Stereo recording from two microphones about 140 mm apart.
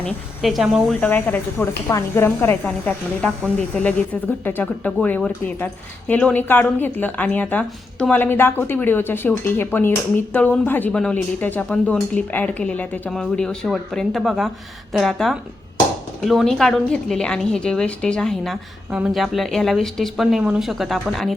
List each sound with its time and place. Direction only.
0.0 s speech: centre (ahead or behind)
1.0 s speech: 15° left (ahead or behind)